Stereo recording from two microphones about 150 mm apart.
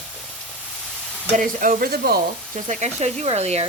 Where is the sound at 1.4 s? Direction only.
60° right (ahead or behind); by 2.2 s 90° right.